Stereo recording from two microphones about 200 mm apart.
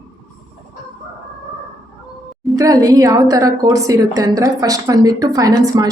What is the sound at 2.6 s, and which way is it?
A woman's voice, 15° right (ahead or behind).